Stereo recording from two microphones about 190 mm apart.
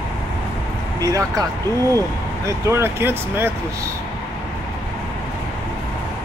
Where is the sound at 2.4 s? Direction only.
15° right (ahead or behind).